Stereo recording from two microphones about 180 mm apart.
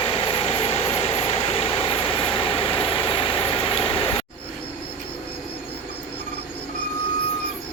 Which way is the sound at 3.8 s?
30° left (ahead or behind).